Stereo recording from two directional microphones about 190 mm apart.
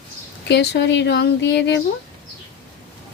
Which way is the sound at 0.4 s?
60° left (ahead or behind).